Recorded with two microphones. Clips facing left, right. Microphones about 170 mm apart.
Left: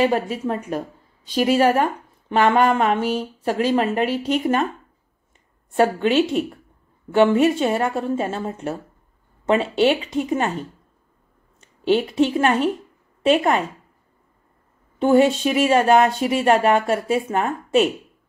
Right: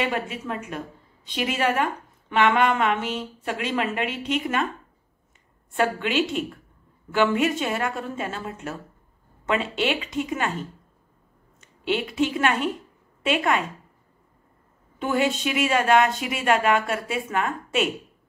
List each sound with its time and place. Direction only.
0.0 s a woman's voice: 40° left (ahead or behind)
5.7 s a woman's voice: 35° left (ahead or behind)
11.6 s a woman's voice: 35° left (ahead or behind)
15.0 s a woman's voice: 35° left (ahead or behind)